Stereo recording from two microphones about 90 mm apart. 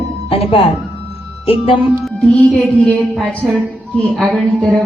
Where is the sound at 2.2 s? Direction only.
10° left (ahead or behind).